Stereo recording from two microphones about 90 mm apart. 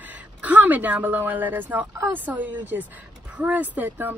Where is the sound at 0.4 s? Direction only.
20° right (ahead or behind).